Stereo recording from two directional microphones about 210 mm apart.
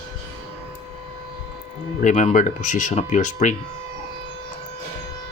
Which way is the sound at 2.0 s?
35° left (ahead or behind).